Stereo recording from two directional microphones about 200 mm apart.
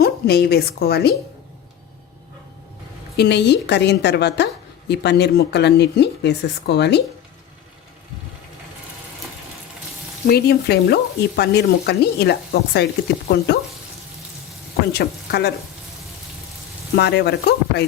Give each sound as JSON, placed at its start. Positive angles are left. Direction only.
{"t": 0.0, "sound": "a woman's voice", "side_deg": 50}
{"t": 3.2, "sound": "frying", "side_deg": 60}
{"t": 10.2, "sound": "frying", "side_deg": 50}
{"t": 14.9, "sound": "frying", "side_deg": 55}
{"t": 16.9, "sound": "frying", "side_deg": 55}